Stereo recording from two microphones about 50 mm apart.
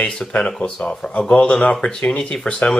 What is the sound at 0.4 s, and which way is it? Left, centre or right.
Speech, centre.